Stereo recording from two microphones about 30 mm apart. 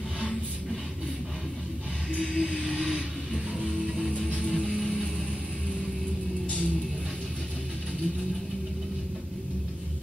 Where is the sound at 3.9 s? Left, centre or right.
Centre.